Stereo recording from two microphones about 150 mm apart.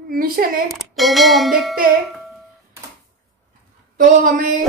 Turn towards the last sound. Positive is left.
turn(degrees=-65)  # may be behind; listen again after turning